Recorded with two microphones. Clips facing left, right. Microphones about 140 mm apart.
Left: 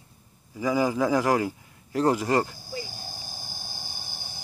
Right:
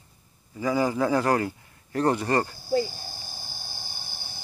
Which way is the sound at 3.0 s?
45° left (ahead or behind).